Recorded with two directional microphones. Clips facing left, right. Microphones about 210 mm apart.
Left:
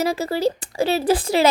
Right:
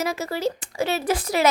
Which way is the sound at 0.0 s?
30° left (ahead or behind).